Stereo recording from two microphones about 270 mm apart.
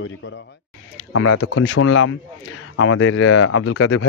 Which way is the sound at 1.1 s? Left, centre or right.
Left.